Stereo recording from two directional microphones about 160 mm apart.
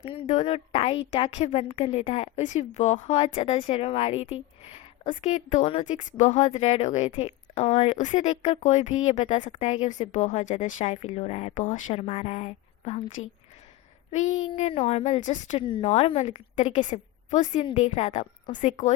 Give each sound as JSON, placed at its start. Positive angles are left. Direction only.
{"t": 0.0, "sound": "a woman's voice", "side_deg": 40}
{"t": 15.6, "sound": "a woman's voice", "side_deg": 35}